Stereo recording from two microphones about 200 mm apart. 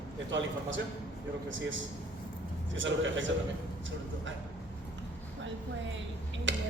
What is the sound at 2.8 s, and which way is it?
Speech, 70° right (ahead or behind).